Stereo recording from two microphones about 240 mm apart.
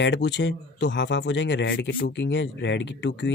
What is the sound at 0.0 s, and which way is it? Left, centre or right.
Speech, left.